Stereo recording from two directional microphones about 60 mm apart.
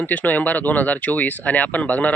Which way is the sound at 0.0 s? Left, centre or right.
Left.